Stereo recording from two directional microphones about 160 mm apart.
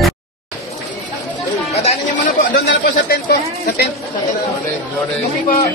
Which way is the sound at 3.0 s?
70° left (ahead or behind).